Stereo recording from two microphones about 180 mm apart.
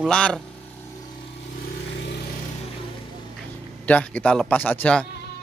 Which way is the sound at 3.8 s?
10° left (ahead or behind).